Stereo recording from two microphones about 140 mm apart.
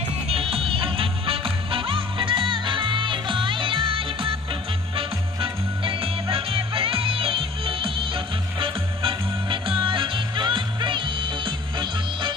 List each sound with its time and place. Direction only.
0.3 s music: 45° right (ahead or behind)